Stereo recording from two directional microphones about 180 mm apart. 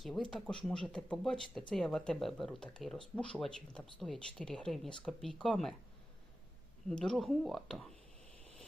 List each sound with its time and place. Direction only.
0.0 s speech: centre (ahead or behind)
6.8 s speech: 5° left (ahead or behind)